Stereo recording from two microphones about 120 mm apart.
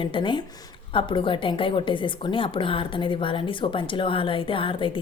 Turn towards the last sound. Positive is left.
turn(degrees=45)  # may be behind; listen again after turning